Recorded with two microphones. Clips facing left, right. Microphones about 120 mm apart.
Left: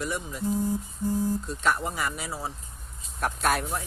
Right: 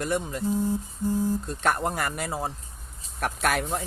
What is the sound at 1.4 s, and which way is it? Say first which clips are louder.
Speech: right 2 dB; 65° right (ahead or behind).